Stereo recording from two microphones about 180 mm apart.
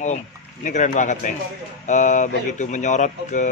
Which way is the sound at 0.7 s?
45° left (ahead or behind).